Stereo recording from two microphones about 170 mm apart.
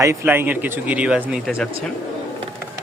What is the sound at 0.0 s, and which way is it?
Speech, 15° right (ahead or behind).